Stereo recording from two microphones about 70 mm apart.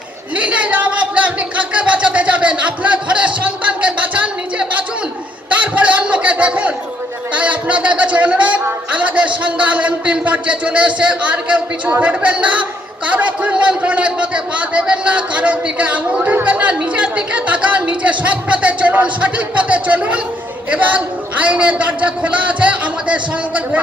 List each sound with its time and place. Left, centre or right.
0.4 s speech: centre
5.5 s fowl: centre
7.3 s a man's voice: centre